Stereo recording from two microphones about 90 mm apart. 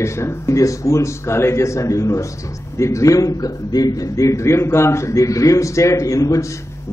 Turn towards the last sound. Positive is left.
turn(degrees=35)  # may be behind; listen again after turning